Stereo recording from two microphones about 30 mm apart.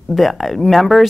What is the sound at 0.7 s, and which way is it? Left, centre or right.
Speech, centre.